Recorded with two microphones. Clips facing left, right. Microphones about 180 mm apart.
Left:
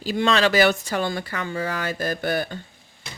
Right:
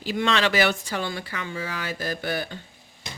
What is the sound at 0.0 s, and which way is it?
Speech, 35° left (ahead or behind).